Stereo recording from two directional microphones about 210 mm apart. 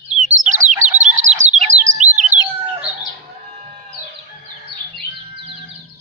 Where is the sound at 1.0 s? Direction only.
35° right (ahead or behind).